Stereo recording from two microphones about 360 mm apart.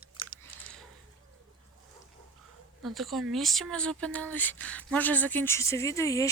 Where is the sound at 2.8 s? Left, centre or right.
Centre.